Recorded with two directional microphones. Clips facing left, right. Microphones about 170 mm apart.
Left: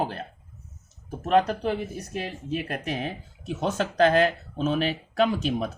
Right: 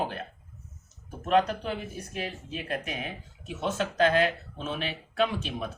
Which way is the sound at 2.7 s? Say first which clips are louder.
Left 3 dB; 35° left (ahead or behind).